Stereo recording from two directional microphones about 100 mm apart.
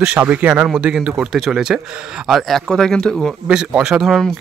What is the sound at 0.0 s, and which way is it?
Speech, 15° right (ahead or behind).